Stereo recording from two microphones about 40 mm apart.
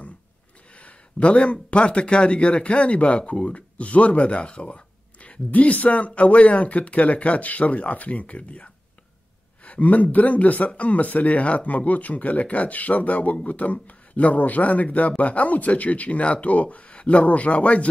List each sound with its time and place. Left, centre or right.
0.7 s speech: left
9.7 s speech: left